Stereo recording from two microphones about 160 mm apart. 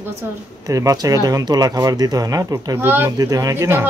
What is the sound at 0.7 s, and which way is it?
A woman's voice, 20° right (ahead or behind).